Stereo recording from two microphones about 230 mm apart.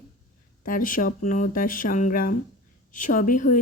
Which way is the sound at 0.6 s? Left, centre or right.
Left.